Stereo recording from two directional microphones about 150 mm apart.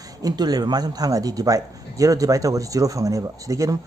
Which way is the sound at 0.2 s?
25° right (ahead or behind).